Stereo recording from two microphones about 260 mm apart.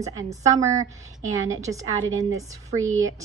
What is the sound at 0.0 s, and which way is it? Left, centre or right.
A woman's voice, centre.